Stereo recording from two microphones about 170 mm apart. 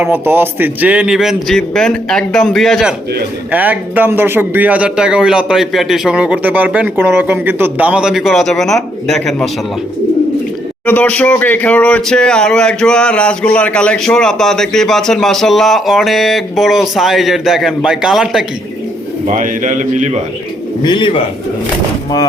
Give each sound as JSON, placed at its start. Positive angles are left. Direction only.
{"t": 0.0, "sound": "speech", "side_deg": -10}
{"t": 3.5, "sound": "speech", "side_deg": -10}
{"t": 10.8, "sound": "speech", "side_deg": 10}
{"t": 19.3, "sound": "a man's voice", "side_deg": -50}
{"t": 20.8, "sound": "a man's voice", "side_deg": 30}